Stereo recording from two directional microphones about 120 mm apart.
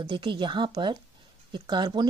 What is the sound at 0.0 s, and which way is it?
A woman's voice, 40° right (ahead or behind).